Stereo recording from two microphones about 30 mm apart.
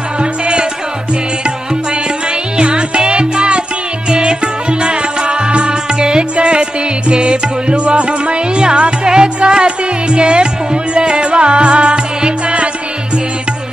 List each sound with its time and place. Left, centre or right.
0.2 s music: right
2.5 s music: right